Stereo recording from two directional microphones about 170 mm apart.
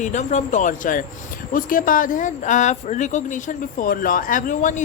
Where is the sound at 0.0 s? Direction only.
45° left (ahead or behind).